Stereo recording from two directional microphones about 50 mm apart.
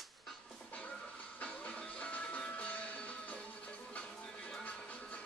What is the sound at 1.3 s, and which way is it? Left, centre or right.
Music, left.